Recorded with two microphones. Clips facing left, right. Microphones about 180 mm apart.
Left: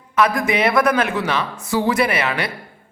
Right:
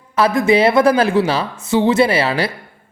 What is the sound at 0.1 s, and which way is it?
A woman's voice, 30° right (ahead or behind).